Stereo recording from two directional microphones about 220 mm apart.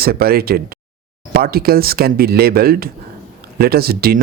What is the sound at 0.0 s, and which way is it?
Speech, 45° right (ahead or behind).